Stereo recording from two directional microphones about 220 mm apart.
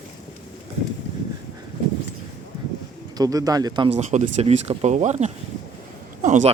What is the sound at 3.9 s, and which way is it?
Speech, 30° right (ahead or behind).